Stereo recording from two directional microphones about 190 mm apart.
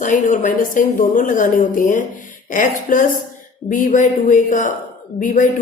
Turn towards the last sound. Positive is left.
turn(degrees=45)  # may be behind; listen again after turning